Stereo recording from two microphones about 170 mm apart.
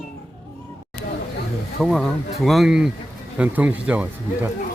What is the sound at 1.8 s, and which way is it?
Speech, centre (ahead or behind).